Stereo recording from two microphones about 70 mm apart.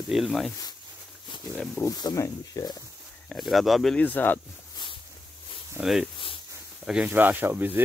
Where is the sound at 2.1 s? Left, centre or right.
Left.